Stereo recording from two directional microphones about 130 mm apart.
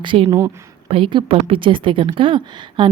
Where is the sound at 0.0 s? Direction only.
40° right (ahead or behind).